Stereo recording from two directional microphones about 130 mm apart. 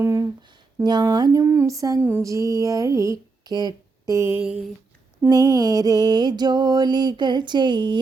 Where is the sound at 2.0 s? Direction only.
15° right (ahead or behind).